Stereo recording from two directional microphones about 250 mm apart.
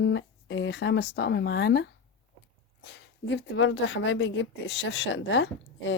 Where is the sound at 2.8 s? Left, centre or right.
Left.